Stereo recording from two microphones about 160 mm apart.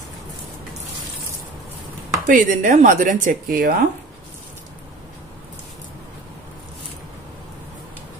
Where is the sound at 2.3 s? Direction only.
55° right (ahead or behind).